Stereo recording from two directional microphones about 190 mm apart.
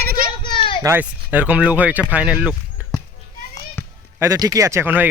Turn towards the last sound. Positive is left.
turn(degrees=-10)  # may be behind; listen again after turning